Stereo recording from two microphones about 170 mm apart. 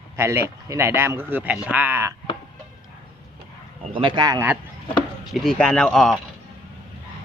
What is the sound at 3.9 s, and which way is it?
Speech, 30° right (ahead or behind).